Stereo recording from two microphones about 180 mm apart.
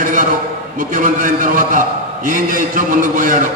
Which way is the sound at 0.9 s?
45° right (ahead or behind).